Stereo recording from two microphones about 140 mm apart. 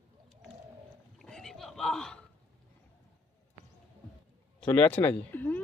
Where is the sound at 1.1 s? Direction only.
5° left (ahead or behind).